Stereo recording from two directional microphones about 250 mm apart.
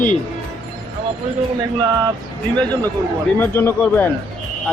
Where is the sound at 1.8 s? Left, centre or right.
Centre.